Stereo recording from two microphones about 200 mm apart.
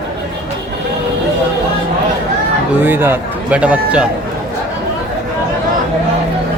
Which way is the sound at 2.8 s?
10° right (ahead or behind).